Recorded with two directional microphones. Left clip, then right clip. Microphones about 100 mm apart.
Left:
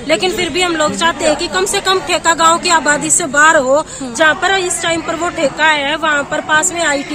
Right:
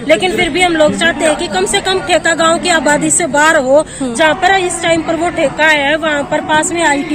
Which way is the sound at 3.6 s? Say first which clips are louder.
Right 3 dB; 20° left (ahead or behind).